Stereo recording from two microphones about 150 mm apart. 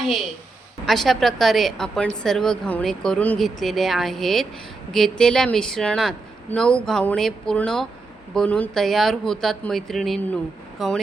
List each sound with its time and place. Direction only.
0.9 s a woman's voice: centre (ahead or behind)